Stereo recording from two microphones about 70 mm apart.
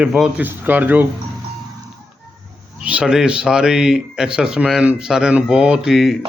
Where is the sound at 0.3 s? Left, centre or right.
Right.